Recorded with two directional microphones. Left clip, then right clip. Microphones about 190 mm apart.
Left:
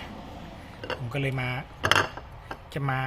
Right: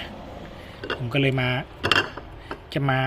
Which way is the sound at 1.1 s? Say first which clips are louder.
Right 9 dB; 20° right (ahead or behind).